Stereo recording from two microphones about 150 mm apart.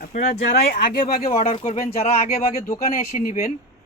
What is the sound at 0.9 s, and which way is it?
Speech, 85° left.